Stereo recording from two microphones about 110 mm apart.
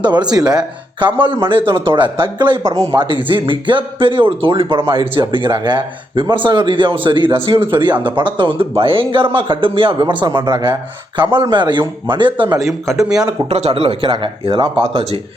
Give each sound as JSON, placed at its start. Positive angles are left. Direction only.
{"t": 0.0, "sound": "speech", "side_deg": -40}
{"t": 2.6, "sound": "speech", "side_deg": -30}
{"t": 3.0, "sound": "speech", "side_deg": -50}
{"t": 12.6, "sound": "speech", "side_deg": 0}
{"t": 13.5, "sound": "speech", "side_deg": -65}